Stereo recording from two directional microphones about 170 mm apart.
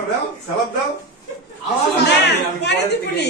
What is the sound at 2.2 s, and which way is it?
A woman's voice, 90° left.